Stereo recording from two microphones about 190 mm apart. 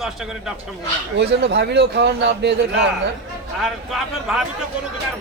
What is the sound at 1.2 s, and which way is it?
A man's voice, 60° right (ahead or behind).